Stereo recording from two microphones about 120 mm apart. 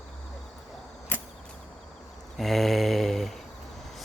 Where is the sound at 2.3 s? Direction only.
Centre (ahead or behind).